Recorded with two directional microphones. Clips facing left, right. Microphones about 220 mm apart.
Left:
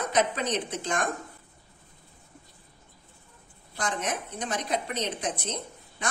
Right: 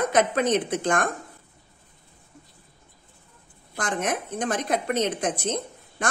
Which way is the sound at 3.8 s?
50° right (ahead or behind).